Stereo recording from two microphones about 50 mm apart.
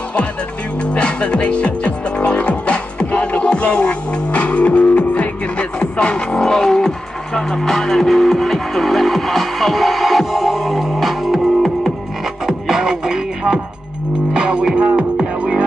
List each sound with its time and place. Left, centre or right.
0.9 s music: left; by 15.5 s centre